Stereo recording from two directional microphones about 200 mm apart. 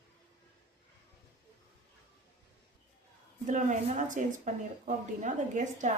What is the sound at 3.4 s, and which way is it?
Speech, 40° right (ahead or behind).